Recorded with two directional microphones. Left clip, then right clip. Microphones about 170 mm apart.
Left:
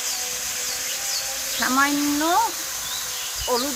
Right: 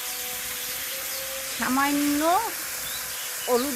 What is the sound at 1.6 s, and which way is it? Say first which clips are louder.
Hair dryer: left 4 dB; 65° right (ahead or behind).